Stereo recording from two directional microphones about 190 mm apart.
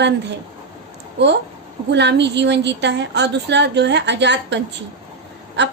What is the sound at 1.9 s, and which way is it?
A woman's voice, 65° right (ahead or behind).